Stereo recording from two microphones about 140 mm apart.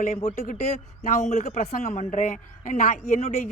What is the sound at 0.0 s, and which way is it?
Speech, 55° left (ahead or behind).